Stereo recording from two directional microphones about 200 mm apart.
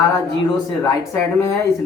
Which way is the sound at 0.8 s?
15° left (ahead or behind).